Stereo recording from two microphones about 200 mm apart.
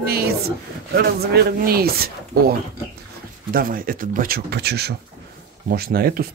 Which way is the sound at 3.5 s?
45° right (ahead or behind).